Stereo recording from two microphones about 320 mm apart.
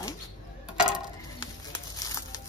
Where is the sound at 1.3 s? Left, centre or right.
Centre.